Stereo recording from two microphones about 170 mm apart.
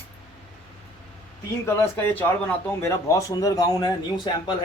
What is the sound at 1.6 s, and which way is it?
A man's voice, 15° left (ahead or behind).